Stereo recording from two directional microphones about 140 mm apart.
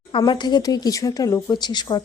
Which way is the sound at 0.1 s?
35° left (ahead or behind).